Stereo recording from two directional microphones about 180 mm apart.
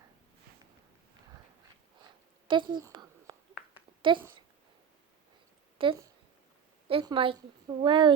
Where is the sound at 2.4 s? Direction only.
25° right (ahead or behind).